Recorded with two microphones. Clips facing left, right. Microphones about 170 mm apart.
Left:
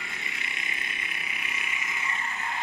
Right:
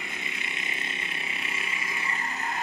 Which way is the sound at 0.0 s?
20° right (ahead or behind).